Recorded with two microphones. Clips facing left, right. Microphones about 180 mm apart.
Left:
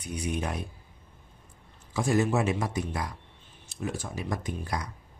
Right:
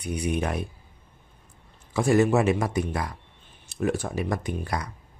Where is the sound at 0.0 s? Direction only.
65° right (ahead or behind).